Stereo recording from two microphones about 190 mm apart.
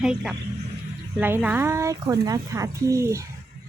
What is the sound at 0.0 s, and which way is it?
Speech, 5° right (ahead or behind).